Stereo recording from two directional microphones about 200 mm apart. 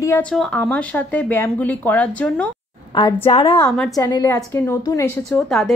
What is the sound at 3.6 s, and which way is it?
Speech, 5° left (ahead or behind).